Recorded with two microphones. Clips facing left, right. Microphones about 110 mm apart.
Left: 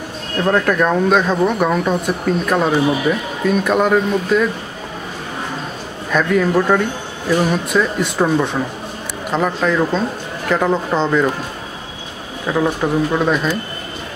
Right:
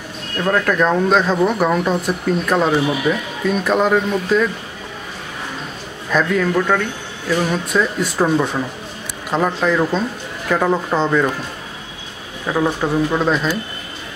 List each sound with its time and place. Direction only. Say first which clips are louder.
0.7 s speech: left 1 dB; centre (ahead or behind)
6.1 s a man's voice: left 2 dB; 5° left (ahead or behind)
8.0 s speech: left 1 dB; 5° right (ahead or behind)
12.4 s speech: left 1 dB; centre (ahead or behind)